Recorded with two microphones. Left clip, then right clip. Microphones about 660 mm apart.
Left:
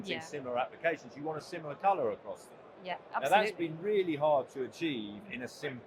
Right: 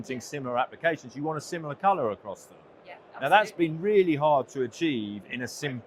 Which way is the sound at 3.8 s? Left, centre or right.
Right.